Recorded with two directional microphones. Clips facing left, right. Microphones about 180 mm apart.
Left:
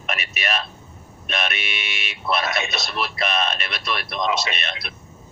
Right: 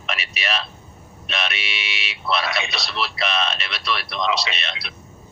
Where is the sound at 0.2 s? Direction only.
50° left (ahead or behind).